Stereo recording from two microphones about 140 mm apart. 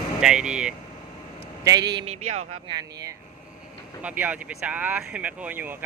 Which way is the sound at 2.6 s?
30° right (ahead or behind).